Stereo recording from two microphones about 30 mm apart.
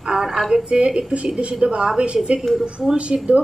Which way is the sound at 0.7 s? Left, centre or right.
Right.